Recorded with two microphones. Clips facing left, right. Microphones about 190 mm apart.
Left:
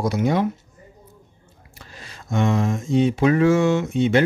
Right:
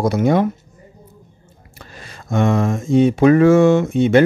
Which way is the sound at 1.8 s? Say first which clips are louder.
Right 4 dB; 55° right (ahead or behind).